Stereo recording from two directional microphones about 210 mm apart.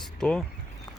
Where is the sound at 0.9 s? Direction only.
20° left (ahead or behind).